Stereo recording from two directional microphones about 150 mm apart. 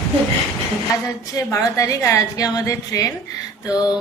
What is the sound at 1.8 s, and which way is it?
A woman's voice, 20° left (ahead or behind).